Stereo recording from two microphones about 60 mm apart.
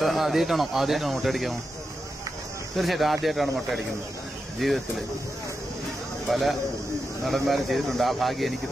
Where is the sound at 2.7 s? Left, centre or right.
Centre.